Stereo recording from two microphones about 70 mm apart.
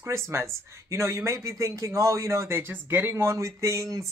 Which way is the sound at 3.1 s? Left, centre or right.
Right.